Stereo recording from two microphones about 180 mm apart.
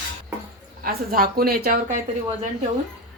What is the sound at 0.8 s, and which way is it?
A woman's voice, 55° right (ahead or behind).